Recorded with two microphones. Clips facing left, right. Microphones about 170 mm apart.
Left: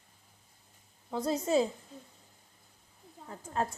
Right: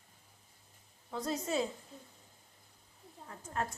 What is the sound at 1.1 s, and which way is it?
Speech, 30° left (ahead or behind).